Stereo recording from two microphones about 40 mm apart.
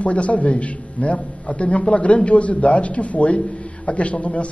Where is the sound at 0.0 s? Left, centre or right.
Left.